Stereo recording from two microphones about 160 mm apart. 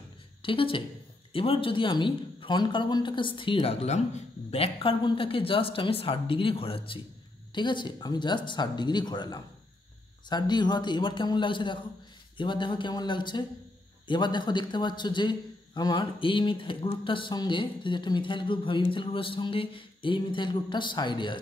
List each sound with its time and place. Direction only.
0.4 s a woman's voice: 35° left (ahead or behind)